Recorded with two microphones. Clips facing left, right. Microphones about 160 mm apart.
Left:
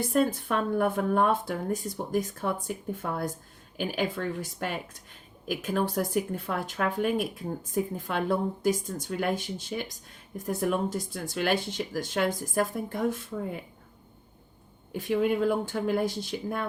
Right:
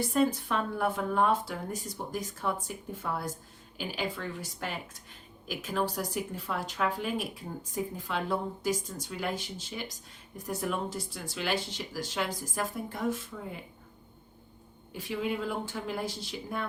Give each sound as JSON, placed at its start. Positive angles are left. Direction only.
{"t": 0.0, "sound": "speech", "side_deg": 50}
{"t": 14.9, "sound": "speech", "side_deg": 50}